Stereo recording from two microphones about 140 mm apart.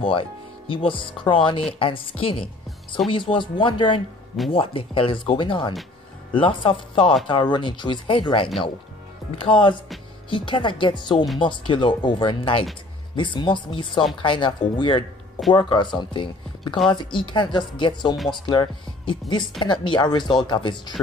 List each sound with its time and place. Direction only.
0.0 s speech: 40° left (ahead or behind)